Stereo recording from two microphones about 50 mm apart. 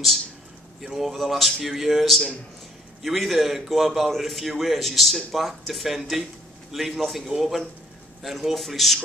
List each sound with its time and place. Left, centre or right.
0.7 s a man's voice: centre